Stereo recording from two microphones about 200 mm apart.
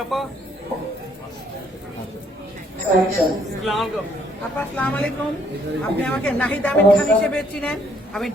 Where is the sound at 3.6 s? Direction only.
Centre (ahead or behind).